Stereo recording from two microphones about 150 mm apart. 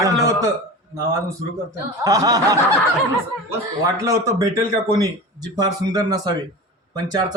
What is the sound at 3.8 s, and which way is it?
Speech, 20° right (ahead or behind).